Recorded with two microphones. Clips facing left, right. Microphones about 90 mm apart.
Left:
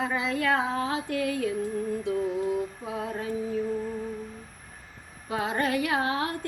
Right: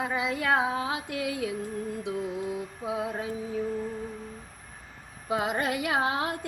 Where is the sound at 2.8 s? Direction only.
15° right (ahead or behind).